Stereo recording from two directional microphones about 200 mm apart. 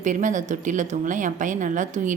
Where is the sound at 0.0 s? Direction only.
40° right (ahead or behind).